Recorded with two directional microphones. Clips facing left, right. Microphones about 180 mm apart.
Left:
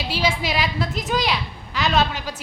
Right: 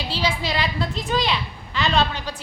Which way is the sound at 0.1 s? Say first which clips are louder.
Left 2 dB; 10° left (ahead or behind).